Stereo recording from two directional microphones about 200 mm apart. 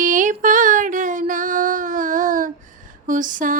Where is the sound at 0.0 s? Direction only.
40° right (ahead or behind).